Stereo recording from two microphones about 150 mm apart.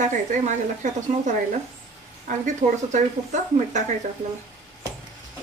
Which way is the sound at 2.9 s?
50° right (ahead or behind).